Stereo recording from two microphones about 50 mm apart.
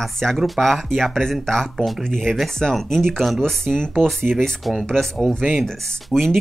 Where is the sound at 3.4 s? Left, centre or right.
Centre.